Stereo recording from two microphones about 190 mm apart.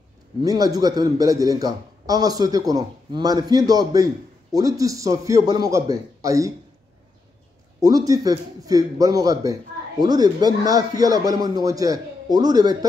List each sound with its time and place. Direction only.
0.4 s a man's voice: 20° right (ahead or behind)
7.8 s a man's voice: 20° right (ahead or behind)